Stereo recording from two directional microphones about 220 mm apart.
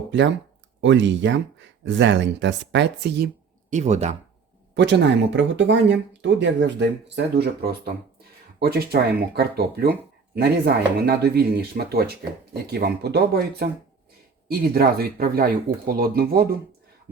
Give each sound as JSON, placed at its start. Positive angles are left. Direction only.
{"t": 0.1, "sound": "speech", "side_deg": -55}
{"t": 3.7, "sound": "speech", "side_deg": -30}
{"t": 4.7, "sound": "speech", "side_deg": -50}
{"t": 11.0, "sound": "speech", "side_deg": -45}